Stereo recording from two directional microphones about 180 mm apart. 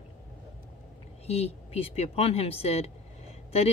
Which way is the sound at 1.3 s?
35° left (ahead or behind).